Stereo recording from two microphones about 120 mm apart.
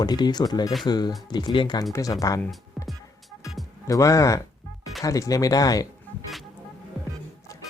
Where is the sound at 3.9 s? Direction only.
25° left (ahead or behind).